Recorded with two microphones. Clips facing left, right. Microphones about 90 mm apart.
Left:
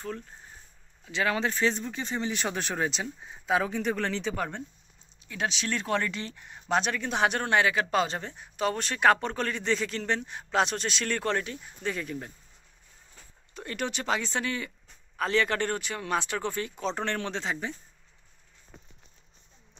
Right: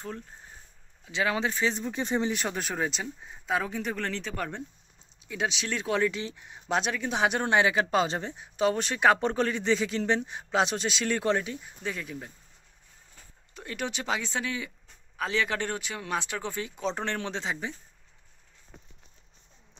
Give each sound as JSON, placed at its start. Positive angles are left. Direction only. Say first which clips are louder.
{"t": 1.0, "sound": "speech", "louder": "even", "side_deg": -15}
{"t": 5.2, "sound": "a man's voice", "louder": "even", "side_deg": -5}
{"t": 7.4, "sound": "a man's voice", "louder": "right 1 dB", "side_deg": -20}
{"t": 13.6, "sound": "a man's voice", "louder": "left 1 dB", "side_deg": -5}